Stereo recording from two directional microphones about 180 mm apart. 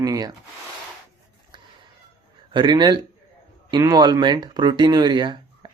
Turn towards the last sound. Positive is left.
turn(degrees=-25)  # may be behind; listen again after turning